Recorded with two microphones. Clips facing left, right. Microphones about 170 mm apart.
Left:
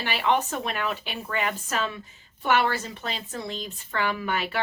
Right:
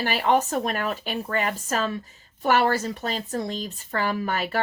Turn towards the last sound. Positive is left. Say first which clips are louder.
# right 2 dB
turn(degrees=-40)  # may be behind; listen again after turning